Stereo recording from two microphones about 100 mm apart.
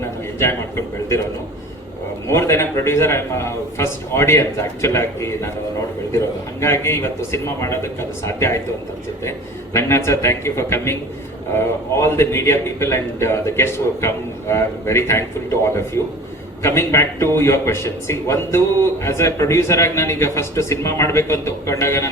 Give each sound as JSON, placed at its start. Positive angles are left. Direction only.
{"t": 0.0, "sound": "a man's voice", "side_deg": 25}
{"t": 2.2, "sound": "a man's voice", "side_deg": 25}
{"t": 9.7, "sound": "a man's voice", "side_deg": 25}